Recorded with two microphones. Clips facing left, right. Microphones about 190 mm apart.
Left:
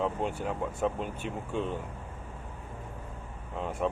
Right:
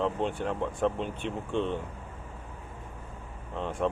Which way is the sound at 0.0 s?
5° left (ahead or behind).